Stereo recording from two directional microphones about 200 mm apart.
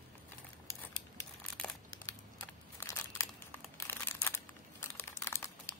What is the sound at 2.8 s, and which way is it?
Crushing, 15° left (ahead or behind).